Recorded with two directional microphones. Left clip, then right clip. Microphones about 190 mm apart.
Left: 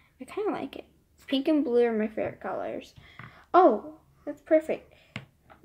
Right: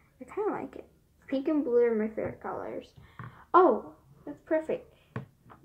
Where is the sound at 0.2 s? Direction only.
40° left (ahead or behind).